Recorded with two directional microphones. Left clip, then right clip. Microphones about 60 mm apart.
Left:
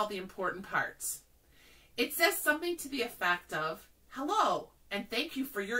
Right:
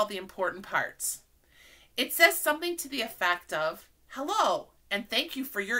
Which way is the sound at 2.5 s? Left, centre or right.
Right.